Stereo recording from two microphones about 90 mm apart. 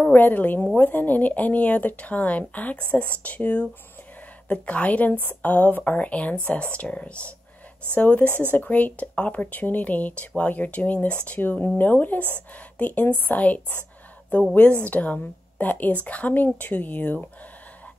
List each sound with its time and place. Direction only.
0.0 s a woman's voice: 20° left (ahead or behind)